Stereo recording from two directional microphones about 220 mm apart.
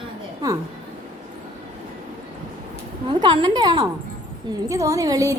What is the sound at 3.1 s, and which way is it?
A woman's voice, 20° right (ahead or behind).